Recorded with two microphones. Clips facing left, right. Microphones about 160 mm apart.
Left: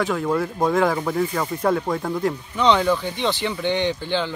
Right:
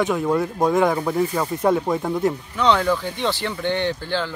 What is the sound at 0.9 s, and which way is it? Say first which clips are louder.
Speech: right 1 dB; 10° right (ahead or behind).